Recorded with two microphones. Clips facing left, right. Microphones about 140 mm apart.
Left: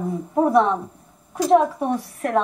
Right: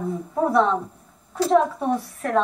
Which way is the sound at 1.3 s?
15° left (ahead or behind).